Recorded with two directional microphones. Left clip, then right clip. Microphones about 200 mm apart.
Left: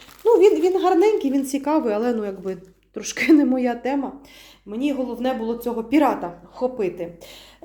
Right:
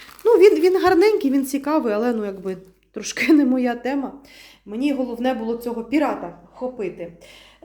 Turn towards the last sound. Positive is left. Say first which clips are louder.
# left 4 dB
turn(degrees=25)  # may be behind; listen again after turning